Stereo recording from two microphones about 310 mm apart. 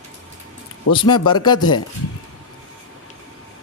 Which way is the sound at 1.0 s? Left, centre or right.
Centre.